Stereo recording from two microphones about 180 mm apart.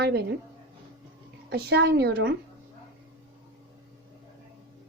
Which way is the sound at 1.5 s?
65° right (ahead or behind).